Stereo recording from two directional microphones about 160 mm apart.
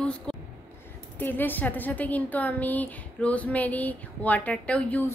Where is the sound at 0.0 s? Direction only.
5° left (ahead or behind).